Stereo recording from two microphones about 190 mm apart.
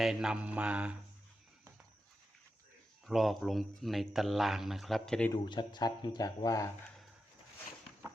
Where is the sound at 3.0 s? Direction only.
Centre (ahead or behind).